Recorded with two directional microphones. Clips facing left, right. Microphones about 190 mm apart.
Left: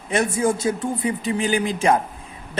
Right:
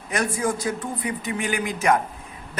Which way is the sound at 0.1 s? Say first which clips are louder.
Left 4 dB; 25° left (ahead or behind).